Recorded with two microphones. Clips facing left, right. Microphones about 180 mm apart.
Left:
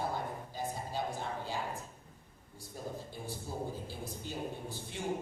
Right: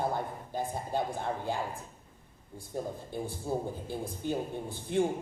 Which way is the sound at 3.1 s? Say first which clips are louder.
Right 8 dB; 55° right (ahead or behind).